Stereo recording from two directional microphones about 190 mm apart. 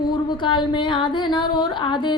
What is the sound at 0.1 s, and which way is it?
Speech, 25° left (ahead or behind).